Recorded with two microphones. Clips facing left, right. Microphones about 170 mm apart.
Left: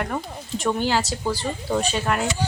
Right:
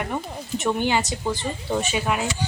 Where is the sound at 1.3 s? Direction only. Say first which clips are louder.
Left 1 dB; 20° right (ahead or behind).